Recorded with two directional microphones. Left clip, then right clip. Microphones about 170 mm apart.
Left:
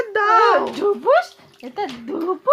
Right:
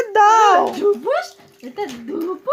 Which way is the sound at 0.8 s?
20° left (ahead or behind).